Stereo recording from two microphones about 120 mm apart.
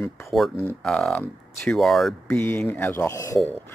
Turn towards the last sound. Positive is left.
turn(degrees=30)  # may be behind; listen again after turning